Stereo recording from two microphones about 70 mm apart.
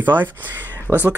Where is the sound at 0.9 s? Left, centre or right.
Right.